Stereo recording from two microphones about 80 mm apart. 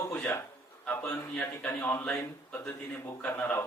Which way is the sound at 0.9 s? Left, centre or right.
Centre.